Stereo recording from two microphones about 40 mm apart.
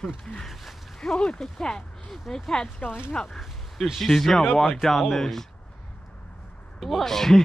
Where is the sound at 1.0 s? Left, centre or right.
Centre.